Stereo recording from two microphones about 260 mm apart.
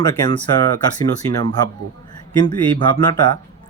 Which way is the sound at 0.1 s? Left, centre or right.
Centre.